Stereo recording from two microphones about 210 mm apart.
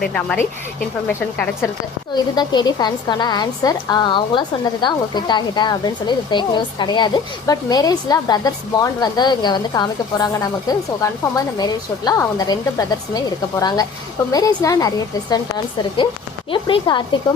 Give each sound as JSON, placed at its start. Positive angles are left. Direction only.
{"t": 0.0, "sound": "a woman's voice", "side_deg": 5}
{"t": 2.1, "sound": "a woman's voice", "side_deg": 20}
{"t": 16.5, "sound": "a woman's voice", "side_deg": 25}